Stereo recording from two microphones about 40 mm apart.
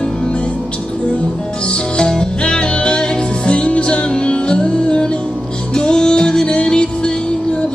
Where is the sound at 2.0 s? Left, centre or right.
Left.